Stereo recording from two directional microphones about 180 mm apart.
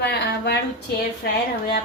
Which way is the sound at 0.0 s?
65° left (ahead or behind).